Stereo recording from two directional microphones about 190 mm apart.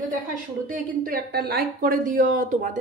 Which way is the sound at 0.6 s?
50° right (ahead or behind).